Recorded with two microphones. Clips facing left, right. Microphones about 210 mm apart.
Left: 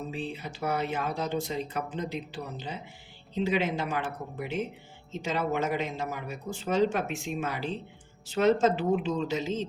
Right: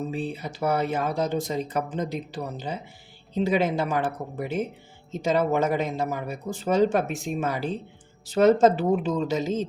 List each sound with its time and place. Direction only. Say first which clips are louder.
0.3 s speech: right 6 dB; 40° right (ahead or behind)